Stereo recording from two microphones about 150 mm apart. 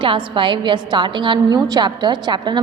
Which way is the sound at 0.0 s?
35° right (ahead or behind).